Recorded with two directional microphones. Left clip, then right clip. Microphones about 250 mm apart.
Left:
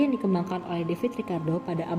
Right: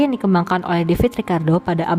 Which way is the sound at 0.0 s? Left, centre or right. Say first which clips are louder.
Right 8 dB; right.